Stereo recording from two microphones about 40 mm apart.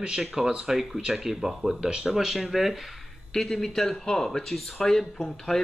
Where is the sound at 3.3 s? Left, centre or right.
Centre.